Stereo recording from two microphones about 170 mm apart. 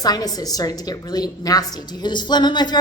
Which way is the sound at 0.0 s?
25° left (ahead or behind).